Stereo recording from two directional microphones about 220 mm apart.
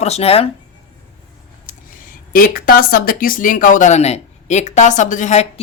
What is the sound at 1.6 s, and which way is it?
Speech, 40° left (ahead or behind).